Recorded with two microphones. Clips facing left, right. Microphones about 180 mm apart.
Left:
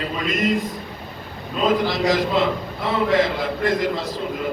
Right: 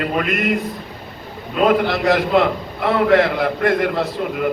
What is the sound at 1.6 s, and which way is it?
A man's voice, 60° right (ahead or behind).